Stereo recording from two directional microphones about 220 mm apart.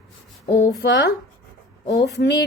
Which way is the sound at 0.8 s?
45° left (ahead or behind).